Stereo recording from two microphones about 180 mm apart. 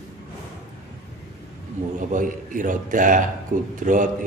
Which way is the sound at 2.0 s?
45° right (ahead or behind).